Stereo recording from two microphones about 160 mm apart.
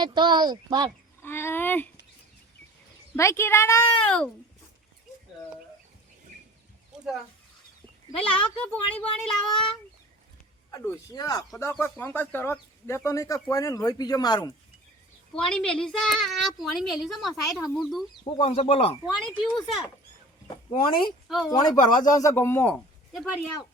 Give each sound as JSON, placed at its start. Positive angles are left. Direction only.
{"t": 0.0, "sound": "speech", "side_deg": -30}
{"t": 1.2, "sound": "a sound", "side_deg": 15}
{"t": 3.2, "sound": "speech", "side_deg": 15}
{"t": 6.9, "sound": "a sound", "side_deg": -5}
{"t": 8.2, "sound": "speech", "side_deg": 10}
{"t": 10.7, "sound": "speech", "side_deg": 20}
{"t": 15.4, "sound": "a woman's voice", "side_deg": 5}
{"t": 18.3, "sound": "speech", "side_deg": 35}
{"t": 20.7, "sound": "speech", "side_deg": 30}
{"t": 21.2, "sound": "speech", "side_deg": 0}
{"t": 21.8, "sound": "speech", "side_deg": 25}
{"t": 23.1, "sound": "a woman's voice", "side_deg": 0}